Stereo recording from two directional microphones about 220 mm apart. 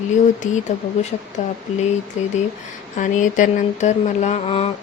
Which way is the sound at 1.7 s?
30° left (ahead or behind).